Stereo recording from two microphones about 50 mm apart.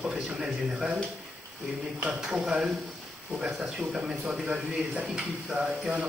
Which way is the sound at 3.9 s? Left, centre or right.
Centre.